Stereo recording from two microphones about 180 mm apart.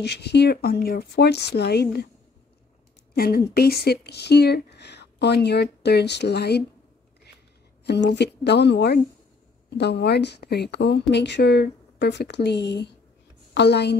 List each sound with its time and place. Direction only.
0.0 s speech: 65° left (ahead or behind)
3.2 s speech: 55° left (ahead or behind)
7.8 s speech: 70° left (ahead or behind)